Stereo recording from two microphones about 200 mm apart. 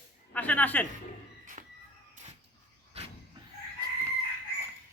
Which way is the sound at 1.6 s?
35° right (ahead or behind).